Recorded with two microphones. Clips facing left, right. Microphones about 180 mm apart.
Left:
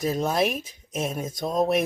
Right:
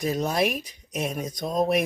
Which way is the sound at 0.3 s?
25° left (ahead or behind).